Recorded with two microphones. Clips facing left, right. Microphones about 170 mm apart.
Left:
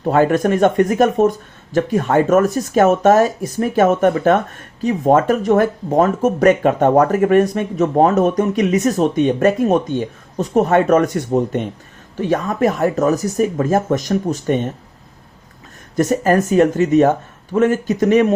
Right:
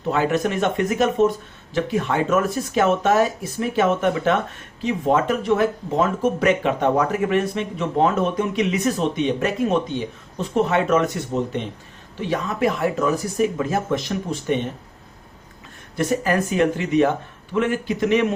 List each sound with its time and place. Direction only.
0.0 s speech: 50° left (ahead or behind)
16.0 s speech: 45° left (ahead or behind)